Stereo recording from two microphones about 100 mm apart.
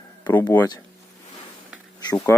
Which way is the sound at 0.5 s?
35° left (ahead or behind).